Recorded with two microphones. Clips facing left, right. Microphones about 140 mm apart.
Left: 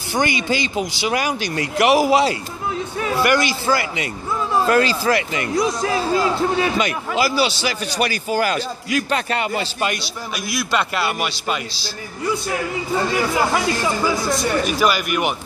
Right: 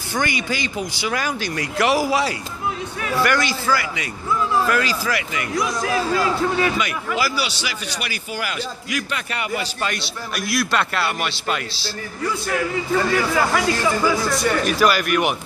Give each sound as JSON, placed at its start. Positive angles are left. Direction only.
{"t": 0.1, "sound": "a man's voice", "side_deg": 20}
{"t": 10.3, "sound": "a man's voice", "side_deg": 0}
{"t": 12.4, "sound": "a man's voice", "side_deg": 20}
{"t": 14.7, "sound": "a man's voice", "side_deg": 0}